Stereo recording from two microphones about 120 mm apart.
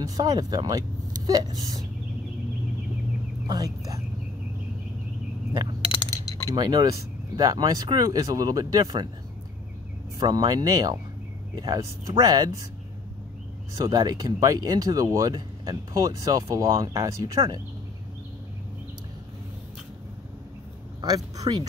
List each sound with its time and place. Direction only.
0.0 s speech: 30° right (ahead or behind)
3.4 s speech: 30° right (ahead or behind)
5.5 s a sound: 35° right (ahead or behind)
5.9 s a sound: 30° left (ahead or behind)
6.5 s speech: 35° right (ahead or behind)
10.1 s speech: 35° right (ahead or behind)
13.7 s speech: 35° right (ahead or behind)
21.0 s speech: 35° right (ahead or behind)